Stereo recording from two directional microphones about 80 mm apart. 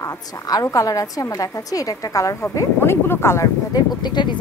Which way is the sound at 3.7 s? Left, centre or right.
Left.